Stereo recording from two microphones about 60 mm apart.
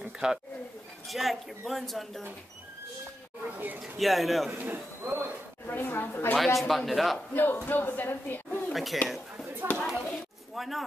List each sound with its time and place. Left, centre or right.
0.2 s speech: centre
1.0 s a man's voice: centre
3.5 s speech: right
3.8 s a man's voice: centre
4.6 s speech: right
5.7 s speech: left
6.3 s a man's voice: centre
7.3 s speech: left
8.7 s a man's voice: centre
9.6 s a sound: right
10.5 s a sound: centre